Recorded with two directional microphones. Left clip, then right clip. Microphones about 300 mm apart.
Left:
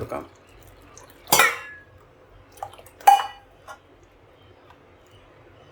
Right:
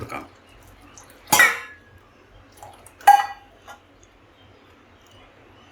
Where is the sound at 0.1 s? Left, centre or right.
Left.